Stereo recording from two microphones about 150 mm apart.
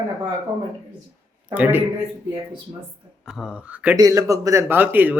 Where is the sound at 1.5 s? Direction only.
10° right (ahead or behind).